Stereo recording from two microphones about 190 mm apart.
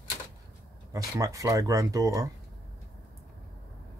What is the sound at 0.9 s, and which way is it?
Speech, 15° right (ahead or behind).